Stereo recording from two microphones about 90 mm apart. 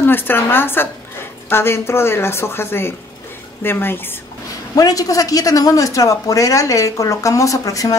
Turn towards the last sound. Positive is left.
turn(degrees=40)  # may be behind; listen again after turning